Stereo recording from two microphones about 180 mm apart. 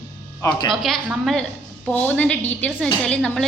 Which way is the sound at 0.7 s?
Centre (ahead or behind).